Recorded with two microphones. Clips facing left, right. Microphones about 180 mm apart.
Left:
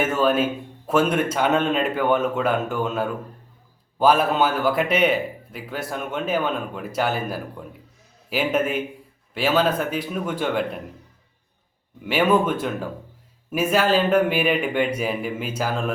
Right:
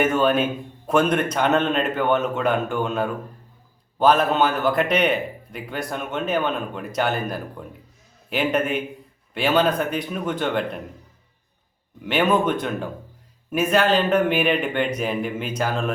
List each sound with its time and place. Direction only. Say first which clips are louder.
0.0 s a man's voice: right 1 dB; 5° left (ahead or behind)
12.0 s a man's voice: left 1 dB; 5° left (ahead or behind)